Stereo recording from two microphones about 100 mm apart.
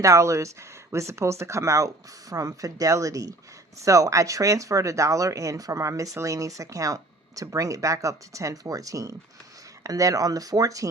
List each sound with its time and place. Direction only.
0.0 s speech: 30° right (ahead or behind)